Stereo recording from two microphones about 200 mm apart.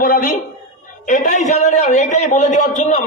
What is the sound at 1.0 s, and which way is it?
A man's voice, 40° left (ahead or behind).